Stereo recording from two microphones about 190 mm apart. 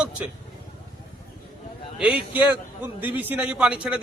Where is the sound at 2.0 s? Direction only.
5° right (ahead or behind).